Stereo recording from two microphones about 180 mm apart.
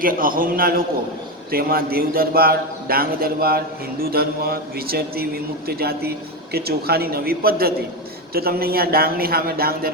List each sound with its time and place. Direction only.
0.0 s a man's voice: 50° right (ahead or behind)